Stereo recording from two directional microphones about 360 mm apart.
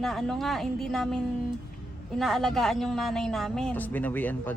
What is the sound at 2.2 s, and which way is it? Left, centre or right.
Speech, centre.